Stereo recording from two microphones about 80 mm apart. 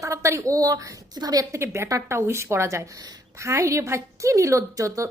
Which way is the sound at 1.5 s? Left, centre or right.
Right.